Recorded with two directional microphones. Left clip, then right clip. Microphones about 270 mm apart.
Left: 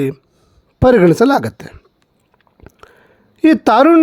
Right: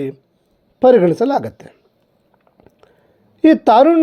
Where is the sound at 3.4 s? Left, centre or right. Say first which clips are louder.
Even; left.